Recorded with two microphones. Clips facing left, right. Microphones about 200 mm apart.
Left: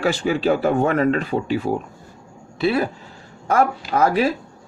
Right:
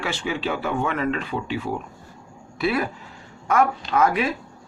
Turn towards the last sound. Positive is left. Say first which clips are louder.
# left 3 dB
turn(degrees=35)  # may be behind; listen again after turning